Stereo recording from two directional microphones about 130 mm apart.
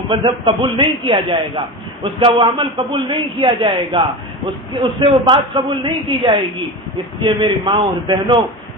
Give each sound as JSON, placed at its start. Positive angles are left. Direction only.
{"t": 0.1, "sound": "a man's voice", "side_deg": -40}